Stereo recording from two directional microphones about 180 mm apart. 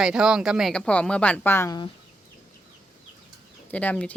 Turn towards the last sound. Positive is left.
turn(degrees=10)  # may be behind; listen again after turning